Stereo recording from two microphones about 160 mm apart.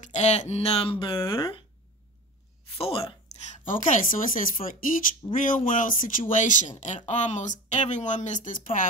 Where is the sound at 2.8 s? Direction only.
35° left (ahead or behind); by 8.8 s 55° left (ahead or behind).